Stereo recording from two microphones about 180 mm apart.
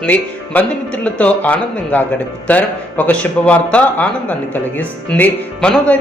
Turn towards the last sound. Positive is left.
turn(degrees=5)  # may be behind; listen again after turning